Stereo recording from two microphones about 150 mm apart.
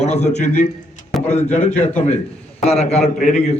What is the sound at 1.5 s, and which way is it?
A man's voice, 50° left (ahead or behind).